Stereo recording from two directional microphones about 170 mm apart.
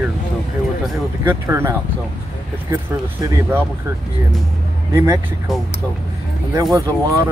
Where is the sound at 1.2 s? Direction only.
15° right (ahead or behind).